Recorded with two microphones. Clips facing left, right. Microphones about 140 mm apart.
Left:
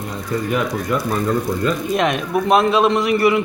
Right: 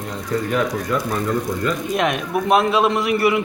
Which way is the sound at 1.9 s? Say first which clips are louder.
Left 1 dB; 5° right (ahead or behind).